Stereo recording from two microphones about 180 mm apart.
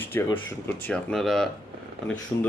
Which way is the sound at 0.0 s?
10° left (ahead or behind).